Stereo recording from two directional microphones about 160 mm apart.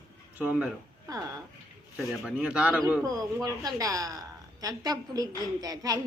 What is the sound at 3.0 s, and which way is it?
A woman's voice, 20° right (ahead or behind).